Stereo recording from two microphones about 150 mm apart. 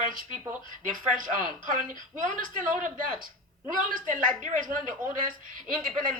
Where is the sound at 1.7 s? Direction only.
65° right (ahead or behind).